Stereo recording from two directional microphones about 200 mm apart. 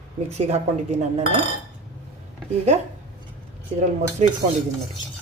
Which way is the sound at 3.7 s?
35° right (ahead or behind).